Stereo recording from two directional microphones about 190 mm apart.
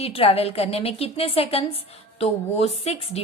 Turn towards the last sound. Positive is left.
turn(degrees=35)  # may be behind; listen again after turning